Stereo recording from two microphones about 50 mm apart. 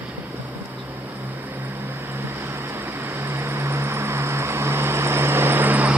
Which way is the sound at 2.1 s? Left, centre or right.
Right.